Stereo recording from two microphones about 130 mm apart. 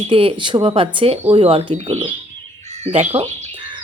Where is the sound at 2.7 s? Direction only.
55° right (ahead or behind).